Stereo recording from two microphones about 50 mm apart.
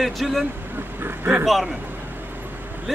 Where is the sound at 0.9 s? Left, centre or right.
Right.